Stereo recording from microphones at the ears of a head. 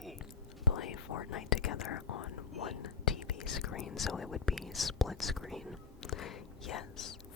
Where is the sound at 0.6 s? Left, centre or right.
Left.